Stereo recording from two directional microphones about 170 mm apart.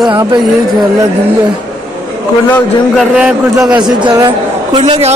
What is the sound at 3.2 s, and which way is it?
Speech, 5° right (ahead or behind).